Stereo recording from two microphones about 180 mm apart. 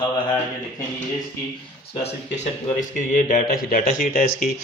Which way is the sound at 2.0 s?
40° left (ahead or behind).